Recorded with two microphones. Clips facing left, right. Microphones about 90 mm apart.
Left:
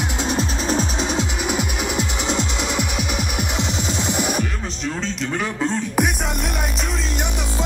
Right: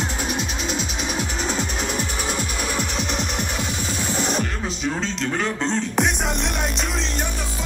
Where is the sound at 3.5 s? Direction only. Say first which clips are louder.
Left 3 dB; 20° left (ahead or behind); by 6.9 s 5° left (ahead or behind).